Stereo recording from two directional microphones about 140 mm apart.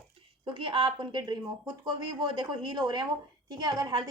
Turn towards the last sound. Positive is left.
turn(degrees=-30)  # may be behind; listen again after turning